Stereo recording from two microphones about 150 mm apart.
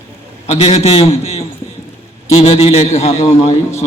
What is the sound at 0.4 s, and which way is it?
A man's voice, 45° left (ahead or behind).